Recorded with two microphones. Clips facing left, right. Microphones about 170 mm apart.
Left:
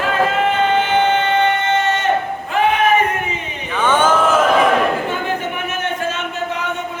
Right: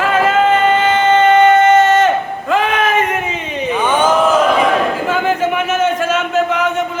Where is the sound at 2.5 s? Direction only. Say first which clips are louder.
Right 1 dB; 90° right.